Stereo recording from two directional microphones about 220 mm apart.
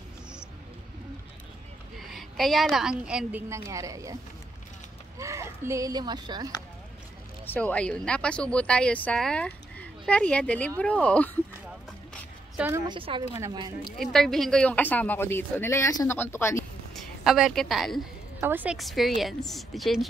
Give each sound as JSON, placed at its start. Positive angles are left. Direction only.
{"t": 2.0, "sound": "speech", "side_deg": 0}
{"t": 5.2, "sound": "speech", "side_deg": -10}
{"t": 7.4, "sound": "speech", "side_deg": 5}
{"t": 12.5, "sound": "a woman's voice", "side_deg": -10}
{"t": 12.8, "sound": "a woman's voice", "side_deg": -20}
{"t": 13.9, "sound": "speech", "side_deg": 0}
{"t": 17.2, "sound": "speech", "side_deg": 0}